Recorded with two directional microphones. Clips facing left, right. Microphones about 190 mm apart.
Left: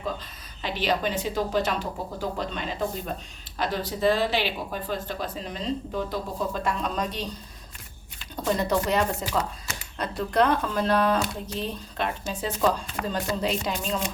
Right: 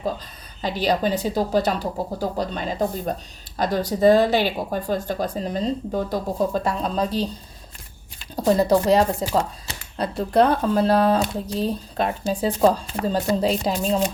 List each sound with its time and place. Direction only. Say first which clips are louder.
0.6 s speech: right 5 dB; 40° right (ahead or behind)
8.4 s speech: right 7 dB; 35° right (ahead or behind)